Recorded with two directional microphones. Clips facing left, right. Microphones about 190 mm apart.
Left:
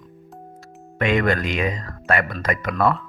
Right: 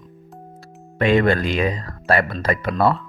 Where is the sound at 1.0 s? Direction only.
35° right (ahead or behind).